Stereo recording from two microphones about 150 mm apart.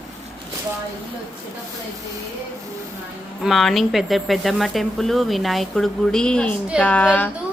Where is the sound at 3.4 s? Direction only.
Centre (ahead or behind).